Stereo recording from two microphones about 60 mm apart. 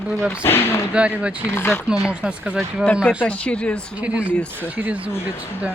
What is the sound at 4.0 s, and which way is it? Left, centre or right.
A man's voice, right.